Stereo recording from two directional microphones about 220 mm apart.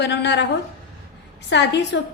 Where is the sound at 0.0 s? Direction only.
50° left (ahead or behind).